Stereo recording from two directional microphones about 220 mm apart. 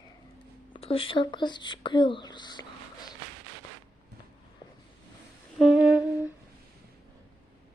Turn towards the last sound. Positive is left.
turn(degrees=-10)  # may be behind; listen again after turning